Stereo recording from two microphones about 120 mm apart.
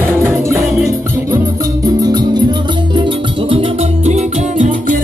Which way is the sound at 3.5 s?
50° right (ahead or behind).